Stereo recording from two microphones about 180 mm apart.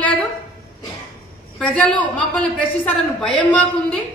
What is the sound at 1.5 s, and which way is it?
A woman's voice, 5° left (ahead or behind).